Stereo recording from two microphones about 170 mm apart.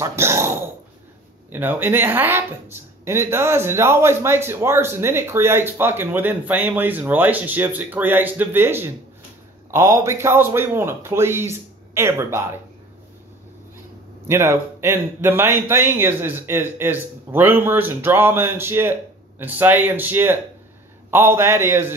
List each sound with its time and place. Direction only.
0.0 s speech: 15° right (ahead or behind)
14.2 s speech: 15° right (ahead or behind)